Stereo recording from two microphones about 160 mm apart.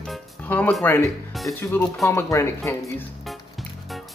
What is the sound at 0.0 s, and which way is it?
Music, 5° left (ahead or behind).